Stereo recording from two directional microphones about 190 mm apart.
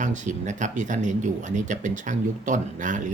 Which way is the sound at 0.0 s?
40° right (ahead or behind).